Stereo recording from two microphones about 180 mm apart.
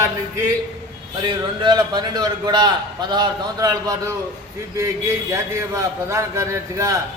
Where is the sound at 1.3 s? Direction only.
25° right (ahead or behind).